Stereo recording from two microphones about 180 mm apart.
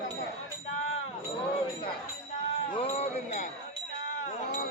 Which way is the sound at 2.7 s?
35° left (ahead or behind).